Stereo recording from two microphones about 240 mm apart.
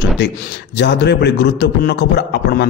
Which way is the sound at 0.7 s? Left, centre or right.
Left.